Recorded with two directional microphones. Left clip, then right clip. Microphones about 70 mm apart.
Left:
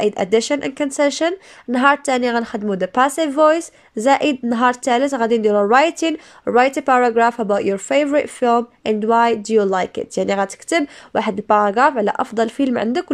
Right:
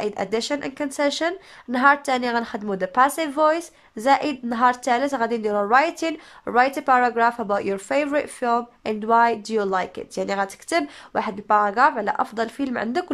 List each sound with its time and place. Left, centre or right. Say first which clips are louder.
0.0 s speech: left 8 dB; left